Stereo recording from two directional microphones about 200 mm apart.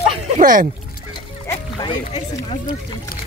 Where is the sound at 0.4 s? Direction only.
45° right (ahead or behind).